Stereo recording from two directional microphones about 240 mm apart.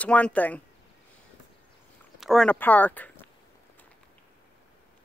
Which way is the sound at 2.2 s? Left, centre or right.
Centre.